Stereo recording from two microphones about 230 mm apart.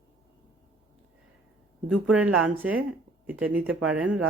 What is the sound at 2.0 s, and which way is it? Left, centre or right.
Speech, centre.